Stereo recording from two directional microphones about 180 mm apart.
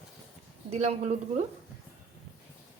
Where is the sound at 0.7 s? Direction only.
35° right (ahead or behind).